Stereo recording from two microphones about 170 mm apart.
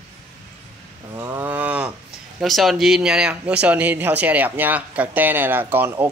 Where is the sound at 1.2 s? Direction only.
15° right (ahead or behind).